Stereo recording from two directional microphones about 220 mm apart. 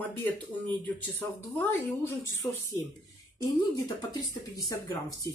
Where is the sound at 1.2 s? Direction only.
10° left (ahead or behind).